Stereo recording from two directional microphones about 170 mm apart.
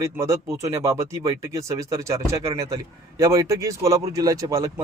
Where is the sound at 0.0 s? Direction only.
20° right (ahead or behind).